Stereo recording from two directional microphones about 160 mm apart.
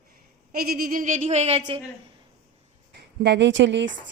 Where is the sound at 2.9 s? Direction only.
90° right.